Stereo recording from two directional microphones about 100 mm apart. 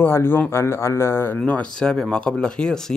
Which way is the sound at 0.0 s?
20° left (ahead or behind).